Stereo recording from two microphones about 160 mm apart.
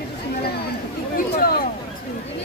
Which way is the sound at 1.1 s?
70° left (ahead or behind).